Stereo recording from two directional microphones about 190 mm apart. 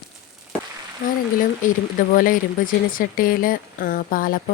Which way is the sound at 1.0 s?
50° left (ahead or behind).